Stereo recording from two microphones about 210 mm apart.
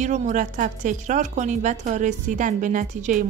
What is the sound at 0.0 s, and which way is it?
A woman's voice, 35° right (ahead or behind).